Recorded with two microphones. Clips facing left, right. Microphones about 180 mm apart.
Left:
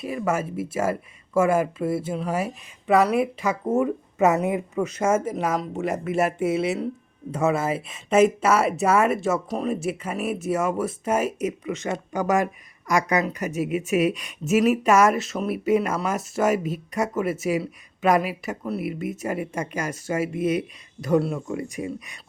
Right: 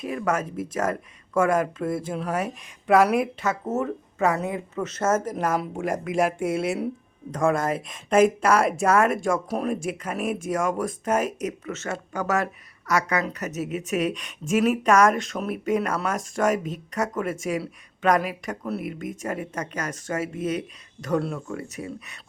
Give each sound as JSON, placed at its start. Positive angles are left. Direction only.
{"t": 0.0, "sound": "speech", "side_deg": 5}
{"t": 3.4, "sound": "speech", "side_deg": 10}